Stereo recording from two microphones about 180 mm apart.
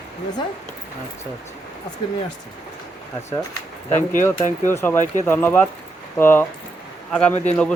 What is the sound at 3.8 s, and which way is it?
Speech, 45° left (ahead or behind).